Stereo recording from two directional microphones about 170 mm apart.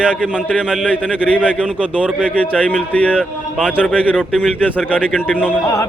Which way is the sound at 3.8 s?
10° left (ahead or behind).